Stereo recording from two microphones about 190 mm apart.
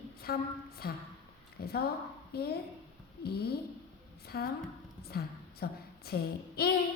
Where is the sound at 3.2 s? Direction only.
55° left (ahead or behind).